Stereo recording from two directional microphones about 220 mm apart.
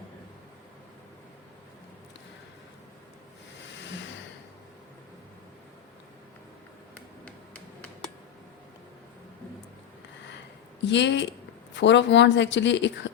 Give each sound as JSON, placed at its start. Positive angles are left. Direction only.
{"t": 10.8, "sound": "a woman's voice", "side_deg": 50}